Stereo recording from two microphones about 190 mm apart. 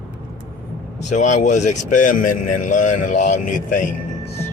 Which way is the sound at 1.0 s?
40° left (ahead or behind).